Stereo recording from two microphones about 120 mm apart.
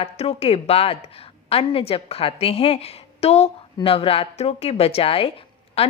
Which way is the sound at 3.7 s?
50° left (ahead or behind).